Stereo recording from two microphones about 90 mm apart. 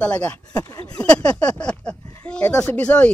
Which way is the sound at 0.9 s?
10° left (ahead or behind).